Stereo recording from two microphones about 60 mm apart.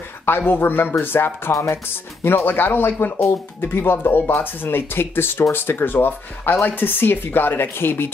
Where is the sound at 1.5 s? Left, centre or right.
Left.